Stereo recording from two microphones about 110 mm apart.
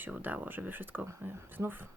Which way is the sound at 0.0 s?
15° right (ahead or behind).